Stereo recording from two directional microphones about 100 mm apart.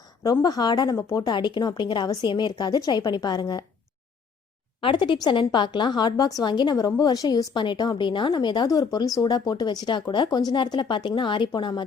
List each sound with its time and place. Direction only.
0.4 s speech: 45° left (ahead or behind)
4.8 s a woman's voice: 55° left (ahead or behind)